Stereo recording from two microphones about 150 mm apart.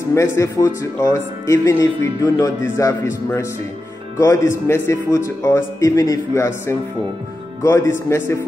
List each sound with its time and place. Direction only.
0.1 s speech: 20° left (ahead or behind)